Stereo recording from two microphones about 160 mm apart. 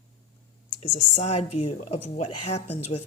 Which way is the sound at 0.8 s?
45° left (ahead or behind).